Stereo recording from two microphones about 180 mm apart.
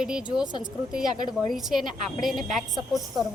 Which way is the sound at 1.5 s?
Centre (ahead or behind).